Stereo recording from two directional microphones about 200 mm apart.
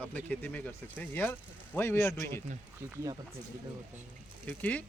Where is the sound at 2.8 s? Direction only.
15° right (ahead or behind).